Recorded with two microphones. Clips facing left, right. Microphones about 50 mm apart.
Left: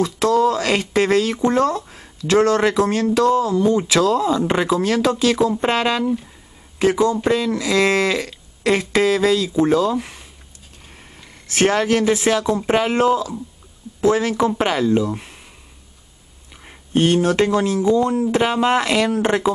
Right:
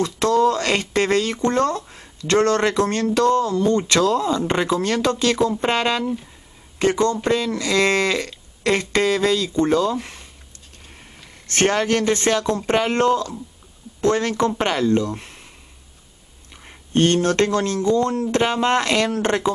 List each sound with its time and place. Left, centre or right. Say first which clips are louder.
0.0 s speech: left 1 dB; centre
16.6 s speech: left 1 dB; centre